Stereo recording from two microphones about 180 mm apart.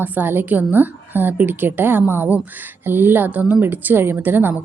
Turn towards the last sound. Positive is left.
turn(degrees=-10)  # may be behind; listen again after turning